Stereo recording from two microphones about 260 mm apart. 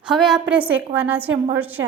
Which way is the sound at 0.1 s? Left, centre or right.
Centre.